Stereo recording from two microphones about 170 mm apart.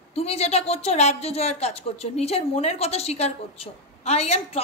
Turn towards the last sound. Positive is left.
turn(degrees=35)  # may be behind; listen again after turning